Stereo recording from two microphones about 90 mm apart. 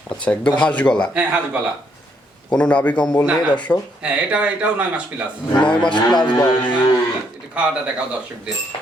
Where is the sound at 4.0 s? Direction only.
10° right (ahead or behind).